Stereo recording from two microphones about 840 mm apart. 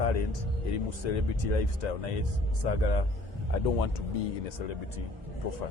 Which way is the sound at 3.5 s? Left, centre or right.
Left.